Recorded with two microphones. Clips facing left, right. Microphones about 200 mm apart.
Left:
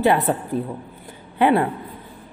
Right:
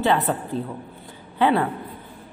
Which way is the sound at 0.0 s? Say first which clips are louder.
Left 3 dB; 15° left (ahead or behind).